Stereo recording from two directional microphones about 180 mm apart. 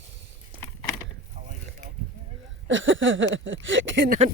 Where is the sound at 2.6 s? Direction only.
90° right.